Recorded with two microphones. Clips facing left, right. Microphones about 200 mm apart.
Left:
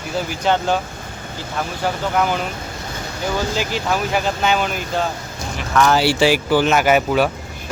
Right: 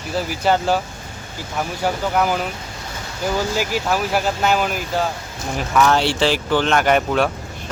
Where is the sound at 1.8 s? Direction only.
5° right (ahead or behind).